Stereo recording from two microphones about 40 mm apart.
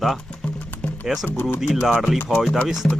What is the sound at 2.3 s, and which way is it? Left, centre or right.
Speech, centre.